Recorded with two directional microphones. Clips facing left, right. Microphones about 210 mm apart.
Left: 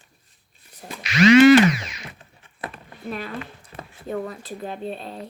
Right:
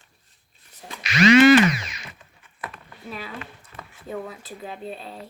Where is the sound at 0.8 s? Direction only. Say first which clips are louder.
Left 3 dB; 5° left (ahead or behind).